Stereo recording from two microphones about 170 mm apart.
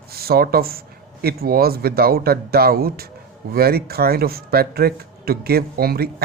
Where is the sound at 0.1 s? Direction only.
65° right (ahead or behind).